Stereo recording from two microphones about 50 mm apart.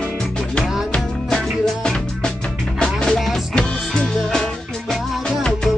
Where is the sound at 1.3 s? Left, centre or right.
Centre.